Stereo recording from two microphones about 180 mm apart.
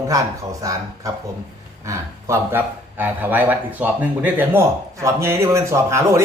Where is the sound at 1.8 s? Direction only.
15° right (ahead or behind).